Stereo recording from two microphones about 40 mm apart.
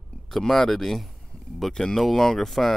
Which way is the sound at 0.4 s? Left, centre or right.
Centre.